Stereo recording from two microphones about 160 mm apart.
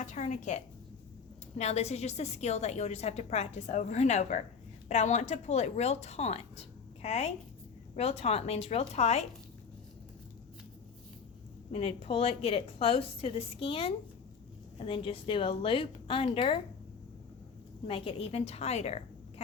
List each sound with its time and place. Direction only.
0.0 s a woman's voice: 50° left (ahead or behind)
11.7 s a woman's voice: 40° left (ahead or behind)
17.8 s a woman's voice: 35° left (ahead or behind)